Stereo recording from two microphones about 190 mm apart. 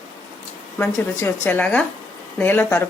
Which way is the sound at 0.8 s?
10° left (ahead or behind).